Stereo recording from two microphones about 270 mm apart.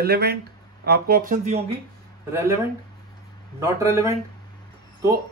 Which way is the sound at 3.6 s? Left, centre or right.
Centre.